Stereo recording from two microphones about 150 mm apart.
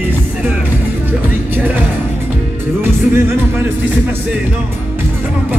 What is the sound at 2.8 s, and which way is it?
Music, 15° right (ahead or behind).